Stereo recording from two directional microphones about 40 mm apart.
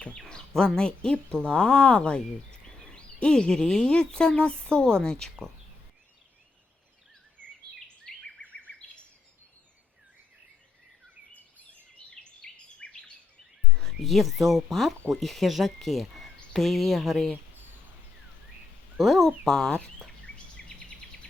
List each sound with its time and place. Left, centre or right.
0.0 s a sound: left
1.3 s speech: left
7.4 s a sound: right
8.0 s bird vocalization: left
12.2 s bird vocalization: left
13.7 s speech: centre
18.9 s speech: centre
20.6 s bird vocalization: centre